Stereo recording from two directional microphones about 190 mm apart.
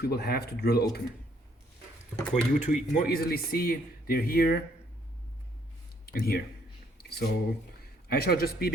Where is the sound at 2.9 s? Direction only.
50° left (ahead or behind).